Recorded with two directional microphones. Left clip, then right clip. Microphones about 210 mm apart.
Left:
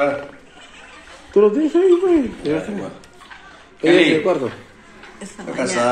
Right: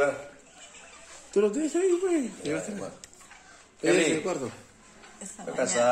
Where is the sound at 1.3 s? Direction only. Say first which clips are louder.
Left 11 dB; 30° right (ahead or behind).